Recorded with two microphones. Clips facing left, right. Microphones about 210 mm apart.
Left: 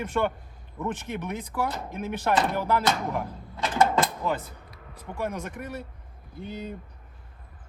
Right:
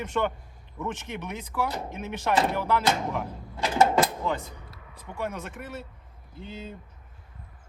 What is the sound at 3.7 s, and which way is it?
Mechanisms, 25° right (ahead or behind).